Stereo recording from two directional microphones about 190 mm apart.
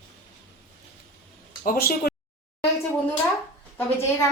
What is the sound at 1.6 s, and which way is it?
Speech, 50° left (ahead or behind).